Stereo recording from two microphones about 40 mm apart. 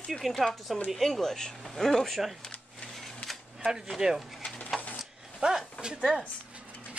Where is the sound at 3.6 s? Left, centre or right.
Centre.